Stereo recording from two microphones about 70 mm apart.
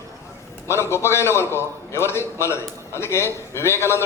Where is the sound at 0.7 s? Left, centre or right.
Left.